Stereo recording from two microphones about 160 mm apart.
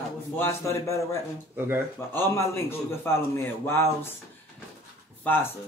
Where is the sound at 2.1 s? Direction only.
15° left (ahead or behind).